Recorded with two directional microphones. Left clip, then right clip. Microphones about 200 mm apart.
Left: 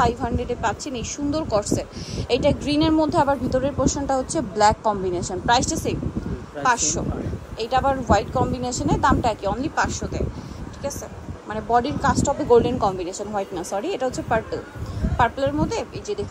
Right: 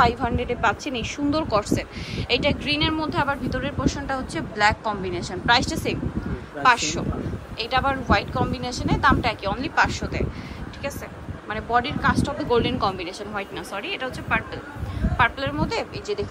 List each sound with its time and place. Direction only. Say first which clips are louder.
0.0 s speech: right 1 dB; 10° left (ahead or behind)
11.4 s speech: left 2 dB; 20° left (ahead or behind)